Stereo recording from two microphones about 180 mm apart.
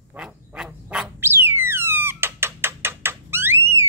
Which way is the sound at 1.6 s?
15° right (ahead or behind).